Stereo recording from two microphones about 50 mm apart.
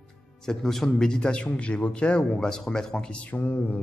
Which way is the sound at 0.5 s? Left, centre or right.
Centre.